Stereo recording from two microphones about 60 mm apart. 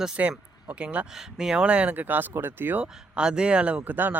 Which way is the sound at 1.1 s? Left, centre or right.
Centre.